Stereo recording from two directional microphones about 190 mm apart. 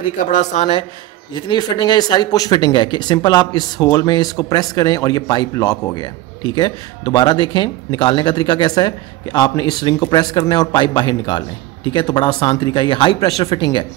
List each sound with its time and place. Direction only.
0.3 s speech: 35° left (ahead or behind)
1.3 s speech: 20° left (ahead or behind)